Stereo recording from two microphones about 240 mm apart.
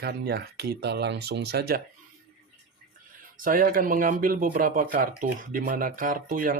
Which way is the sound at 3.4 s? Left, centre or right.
Right.